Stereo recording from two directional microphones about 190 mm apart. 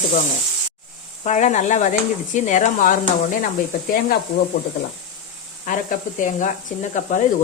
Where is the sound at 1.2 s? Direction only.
40° left (ahead or behind).